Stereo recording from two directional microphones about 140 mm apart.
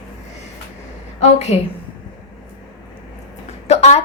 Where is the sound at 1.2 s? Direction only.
50° left (ahead or behind).